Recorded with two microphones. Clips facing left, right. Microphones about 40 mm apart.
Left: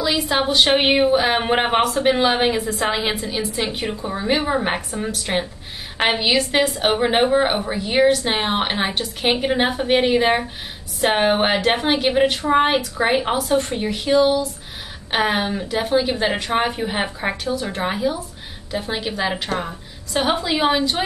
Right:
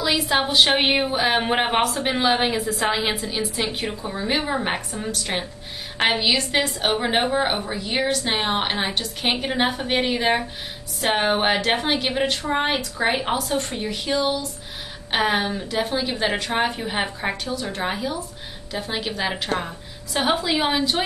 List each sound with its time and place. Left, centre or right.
0.0 s a woman's voice: centre